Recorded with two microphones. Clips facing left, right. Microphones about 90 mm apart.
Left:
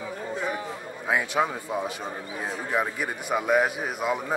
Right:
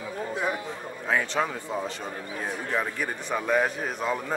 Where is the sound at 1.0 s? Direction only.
10° left (ahead or behind).